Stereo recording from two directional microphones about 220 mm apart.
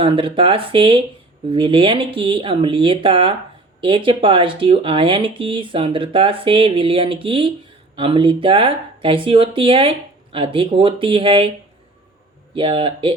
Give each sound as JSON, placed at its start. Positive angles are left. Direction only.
{"t": 0.0, "sound": "speech", "side_deg": -25}
{"t": 12.5, "sound": "speech", "side_deg": -25}